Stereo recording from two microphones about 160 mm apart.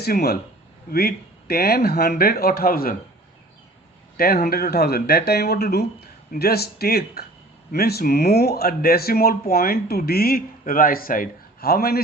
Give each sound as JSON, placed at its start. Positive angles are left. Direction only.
{"t": 0.0, "sound": "speech", "side_deg": 80}
{"t": 4.2, "sound": "speech", "side_deg": 70}